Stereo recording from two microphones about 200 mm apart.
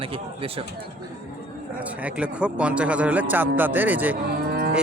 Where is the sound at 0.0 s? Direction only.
30° right (ahead or behind).